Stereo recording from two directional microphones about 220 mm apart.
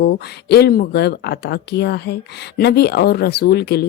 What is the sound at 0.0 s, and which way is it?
Speech, 45° left (ahead or behind).